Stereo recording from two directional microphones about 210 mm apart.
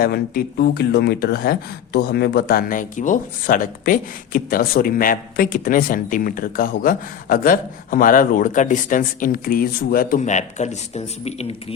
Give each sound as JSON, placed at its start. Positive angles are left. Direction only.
{"t": 0.0, "sound": "speech", "side_deg": 45}